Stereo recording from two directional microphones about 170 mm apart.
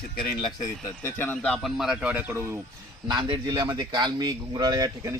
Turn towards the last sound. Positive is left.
turn(degrees=-20)  # may be behind; listen again after turning